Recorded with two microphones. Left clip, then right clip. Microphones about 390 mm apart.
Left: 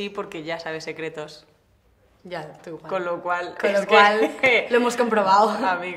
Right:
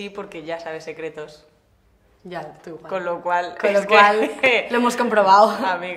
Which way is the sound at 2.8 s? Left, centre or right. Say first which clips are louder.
Right 1 dB; left.